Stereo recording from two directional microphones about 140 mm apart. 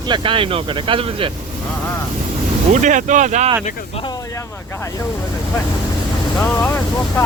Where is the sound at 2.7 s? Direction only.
60° right (ahead or behind).